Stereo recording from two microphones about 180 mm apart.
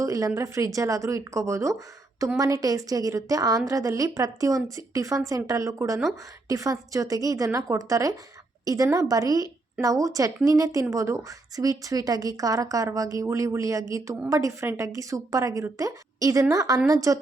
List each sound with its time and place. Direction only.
0.0 s a woman's voice: 15° right (ahead or behind)